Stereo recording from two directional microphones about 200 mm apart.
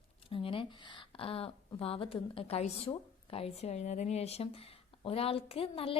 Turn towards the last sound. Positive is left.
turn(degrees=30)  # may be behind; listen again after turning